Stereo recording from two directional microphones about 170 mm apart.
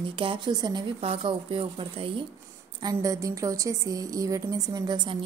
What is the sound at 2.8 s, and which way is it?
A woman's voice, 20° right (ahead or behind).